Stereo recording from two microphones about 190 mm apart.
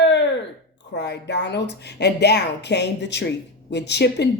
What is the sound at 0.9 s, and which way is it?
Speech, 65° left (ahead or behind).